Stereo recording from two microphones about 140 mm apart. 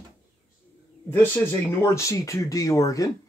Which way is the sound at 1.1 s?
15° left (ahead or behind).